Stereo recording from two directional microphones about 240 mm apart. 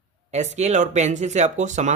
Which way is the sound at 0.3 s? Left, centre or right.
Right.